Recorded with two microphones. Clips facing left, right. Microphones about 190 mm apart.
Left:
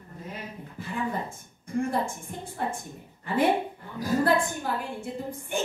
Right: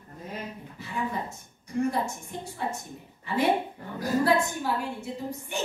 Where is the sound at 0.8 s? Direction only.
50° left (ahead or behind).